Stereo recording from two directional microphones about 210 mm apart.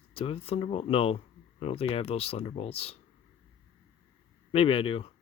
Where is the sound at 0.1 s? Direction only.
25° left (ahead or behind).